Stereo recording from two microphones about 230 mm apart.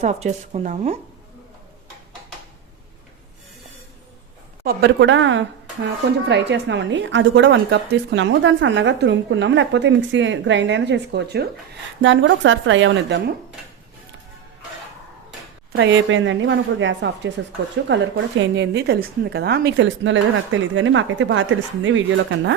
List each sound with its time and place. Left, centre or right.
0.0 s speech: right
4.6 s a woman's voice: right
15.7 s a woman's voice: right